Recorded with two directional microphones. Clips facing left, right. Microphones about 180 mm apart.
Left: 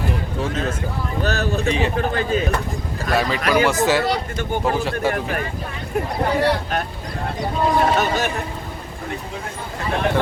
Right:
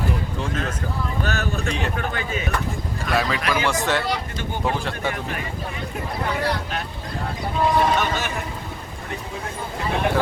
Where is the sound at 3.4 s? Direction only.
45° left (ahead or behind).